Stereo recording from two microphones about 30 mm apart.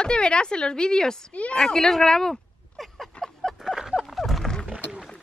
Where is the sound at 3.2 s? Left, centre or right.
Centre.